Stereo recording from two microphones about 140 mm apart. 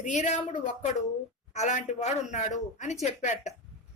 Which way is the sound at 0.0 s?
60° left (ahead or behind).